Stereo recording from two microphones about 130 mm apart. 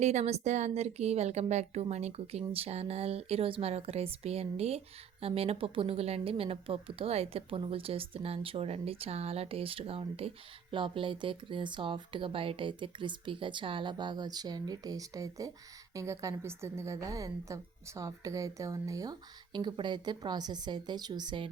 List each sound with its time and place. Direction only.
0.0 s a woman's voice: 60° right (ahead or behind); by 21.4 s 35° right (ahead or behind)